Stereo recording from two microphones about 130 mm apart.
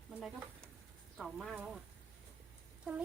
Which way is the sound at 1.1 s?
Centre (ahead or behind).